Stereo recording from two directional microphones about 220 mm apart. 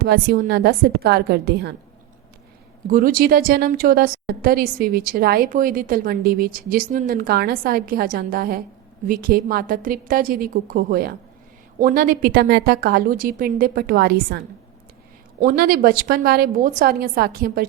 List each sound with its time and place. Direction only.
0.0 s a woman's voice: 45° right (ahead or behind)
2.8 s a woman's voice: 40° right (ahead or behind)